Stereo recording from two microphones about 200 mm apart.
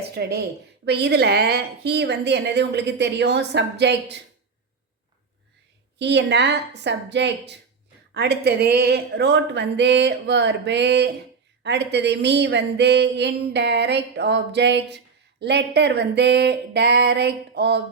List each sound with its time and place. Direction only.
0.1 s speech: 55° right (ahead or behind)
6.0 s speech: 60° right (ahead or behind)